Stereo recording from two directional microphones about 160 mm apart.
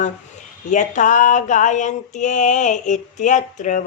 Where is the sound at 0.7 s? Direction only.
50° left (ahead or behind).